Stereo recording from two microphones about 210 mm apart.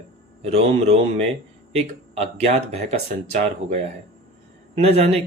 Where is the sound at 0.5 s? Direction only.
30° right (ahead or behind).